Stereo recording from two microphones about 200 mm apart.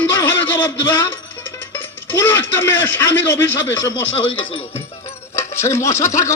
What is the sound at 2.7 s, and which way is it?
Speech, 65° left (ahead or behind).